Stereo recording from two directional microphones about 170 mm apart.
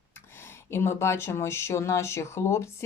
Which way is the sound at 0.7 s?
15° left (ahead or behind).